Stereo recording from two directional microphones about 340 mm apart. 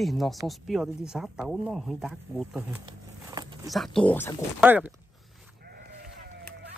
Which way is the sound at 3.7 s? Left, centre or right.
Centre.